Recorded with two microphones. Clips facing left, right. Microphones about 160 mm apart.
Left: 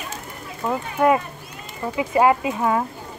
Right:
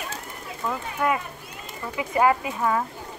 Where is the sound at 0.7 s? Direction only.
35° left (ahead or behind).